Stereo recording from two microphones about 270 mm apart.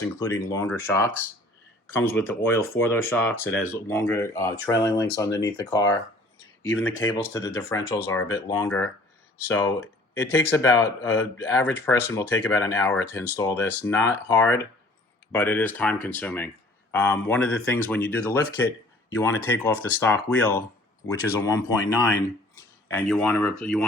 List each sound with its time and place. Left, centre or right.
0.0 s speech: centre
6.6 s speech: left
7.3 s speech: centre